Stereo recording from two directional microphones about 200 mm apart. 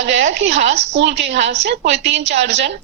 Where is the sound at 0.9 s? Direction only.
60° right (ahead or behind).